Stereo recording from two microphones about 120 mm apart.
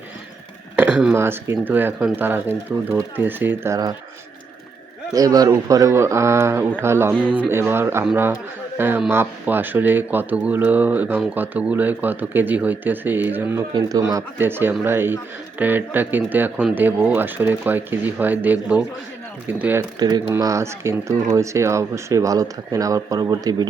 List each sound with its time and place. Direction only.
0.8 s a sound: 10° right (ahead or behind)
1.1 s speech: 20° right (ahead or behind)
5.1 s speech: 30° right (ahead or behind); by 19.8 s 15° right (ahead or behind)
20.0 s speech: 35° right (ahead or behind)